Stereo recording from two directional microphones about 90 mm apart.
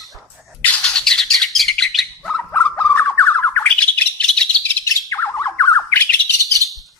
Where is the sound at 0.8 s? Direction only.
5° left (ahead or behind).